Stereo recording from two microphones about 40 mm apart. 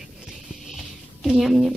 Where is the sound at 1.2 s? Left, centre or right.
Centre.